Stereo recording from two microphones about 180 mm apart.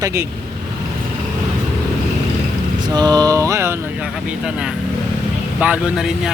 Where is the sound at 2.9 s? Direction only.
20° right (ahead or behind).